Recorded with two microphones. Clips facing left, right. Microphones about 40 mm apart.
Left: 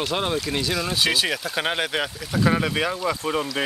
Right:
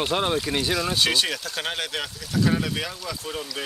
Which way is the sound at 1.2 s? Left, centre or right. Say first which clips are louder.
Left 4 dB; centre.